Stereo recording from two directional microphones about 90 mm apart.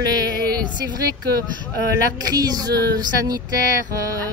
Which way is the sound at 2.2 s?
45° right (ahead or behind).